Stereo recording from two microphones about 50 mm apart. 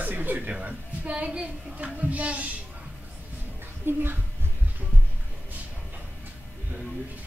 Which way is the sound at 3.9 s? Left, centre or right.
Right.